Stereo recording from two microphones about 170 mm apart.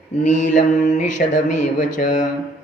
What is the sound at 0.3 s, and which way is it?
A man's voice, 50° left (ahead or behind).